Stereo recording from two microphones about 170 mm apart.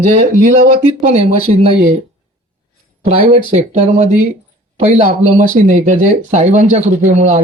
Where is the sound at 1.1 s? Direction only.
40° right (ahead or behind).